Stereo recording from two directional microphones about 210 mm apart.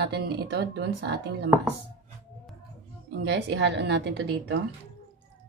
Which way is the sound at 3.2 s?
55° right (ahead or behind).